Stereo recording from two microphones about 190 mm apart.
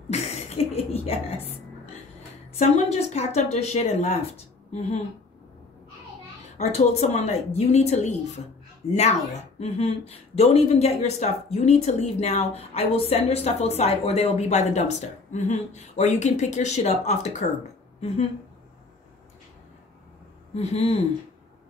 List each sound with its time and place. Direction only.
0.1 s a sound: 35° left (ahead or behind)
2.6 s a woman's voice: 35° left (ahead or behind)
6.6 s a woman's voice: 35° left (ahead or behind)
20.5 s a woman's voice: 35° left (ahead or behind)